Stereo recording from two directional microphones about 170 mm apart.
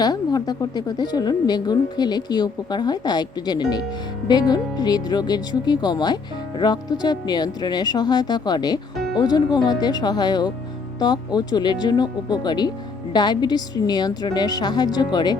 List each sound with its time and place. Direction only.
0.0 s a woman's voice: 25° left (ahead or behind)